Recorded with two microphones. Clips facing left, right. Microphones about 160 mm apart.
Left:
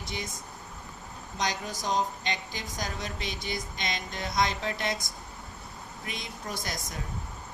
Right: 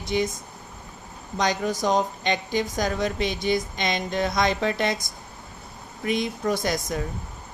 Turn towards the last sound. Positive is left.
turn(degrees=-90)